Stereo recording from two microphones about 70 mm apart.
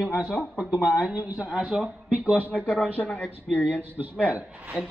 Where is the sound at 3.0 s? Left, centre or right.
Left.